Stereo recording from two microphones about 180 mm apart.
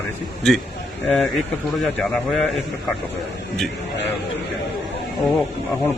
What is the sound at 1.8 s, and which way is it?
Speech, centre (ahead or behind).